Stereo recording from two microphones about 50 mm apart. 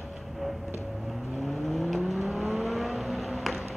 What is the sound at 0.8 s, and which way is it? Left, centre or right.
Vehicle, centre.